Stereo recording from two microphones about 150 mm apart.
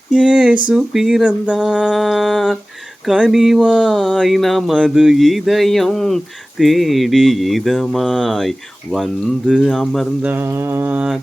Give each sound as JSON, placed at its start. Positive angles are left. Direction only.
{"t": 0.1, "sound": "speech", "side_deg": -5}
{"t": 10.2, "sound": "mantra", "side_deg": -15}